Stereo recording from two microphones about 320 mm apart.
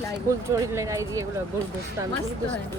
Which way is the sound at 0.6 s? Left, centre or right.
Centre.